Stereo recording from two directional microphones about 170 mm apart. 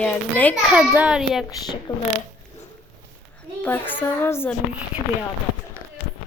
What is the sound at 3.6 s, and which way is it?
Speech, 10° left (ahead or behind).